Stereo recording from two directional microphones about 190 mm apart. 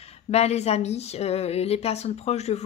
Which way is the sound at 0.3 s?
35° left (ahead or behind).